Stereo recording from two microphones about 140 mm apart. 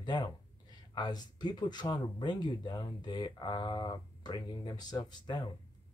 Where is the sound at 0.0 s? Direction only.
30° left (ahead or behind).